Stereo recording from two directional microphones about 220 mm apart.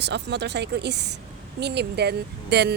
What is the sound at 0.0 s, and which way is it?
Speech, 50° right (ahead or behind).